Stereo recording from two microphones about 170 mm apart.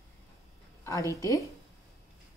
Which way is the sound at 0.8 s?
20° left (ahead or behind).